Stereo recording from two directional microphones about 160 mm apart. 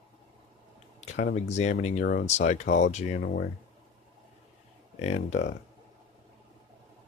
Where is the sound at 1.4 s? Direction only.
45° left (ahead or behind).